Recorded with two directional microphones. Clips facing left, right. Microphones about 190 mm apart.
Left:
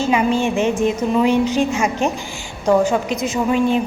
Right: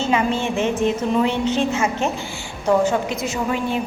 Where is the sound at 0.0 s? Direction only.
15° left (ahead or behind).